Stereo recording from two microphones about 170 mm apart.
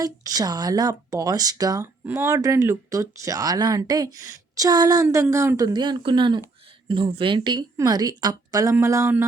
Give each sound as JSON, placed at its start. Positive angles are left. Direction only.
{"t": 0.0, "sound": "speech", "side_deg": -20}